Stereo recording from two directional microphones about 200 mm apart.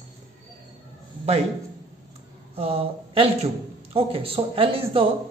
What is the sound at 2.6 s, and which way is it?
A man's voice, 30° right (ahead or behind).